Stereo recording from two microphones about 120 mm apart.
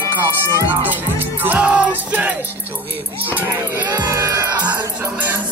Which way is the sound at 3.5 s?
25° right (ahead or behind).